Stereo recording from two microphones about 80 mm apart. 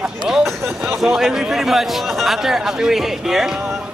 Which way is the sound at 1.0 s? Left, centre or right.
Centre.